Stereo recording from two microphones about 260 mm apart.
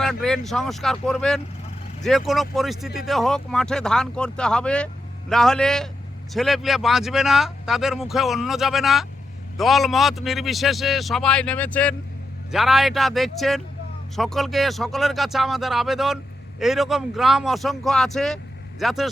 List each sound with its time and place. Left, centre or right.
0.0 s speech: centre